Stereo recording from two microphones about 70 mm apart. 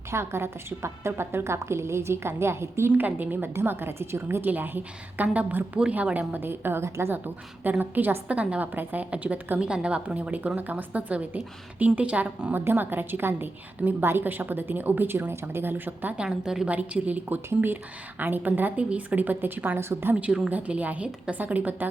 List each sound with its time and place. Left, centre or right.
0.1 s a woman's voice: right
2.9 s a woman's voice: right
7.6 s a woman's voice: right
16.1 s a woman's voice: centre
16.6 s a woman's voice: right
20.1 s a woman's voice: centre